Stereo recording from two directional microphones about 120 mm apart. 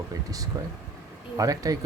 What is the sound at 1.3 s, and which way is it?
Speech, 30° right (ahead or behind).